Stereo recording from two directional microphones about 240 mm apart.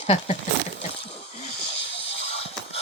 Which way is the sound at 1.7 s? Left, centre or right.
Left.